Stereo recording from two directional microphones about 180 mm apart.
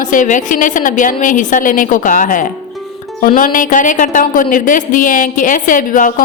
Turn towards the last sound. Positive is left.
turn(degrees=50)  # may be behind; listen again after turning